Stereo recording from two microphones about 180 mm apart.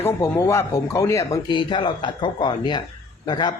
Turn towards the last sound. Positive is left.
turn(degrees=25)  # may be behind; listen again after turning